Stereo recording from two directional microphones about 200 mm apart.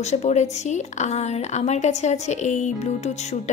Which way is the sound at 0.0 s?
35° left (ahead or behind).